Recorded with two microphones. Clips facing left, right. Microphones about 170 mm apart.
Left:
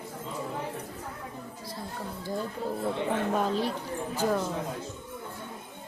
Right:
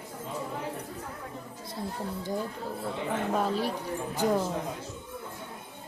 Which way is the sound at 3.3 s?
5° right (ahead or behind).